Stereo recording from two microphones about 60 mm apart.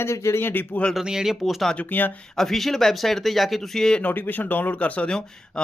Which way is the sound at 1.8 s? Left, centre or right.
Left.